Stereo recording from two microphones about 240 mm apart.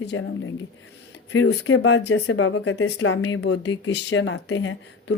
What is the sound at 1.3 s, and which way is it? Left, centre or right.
A woman's voice, left.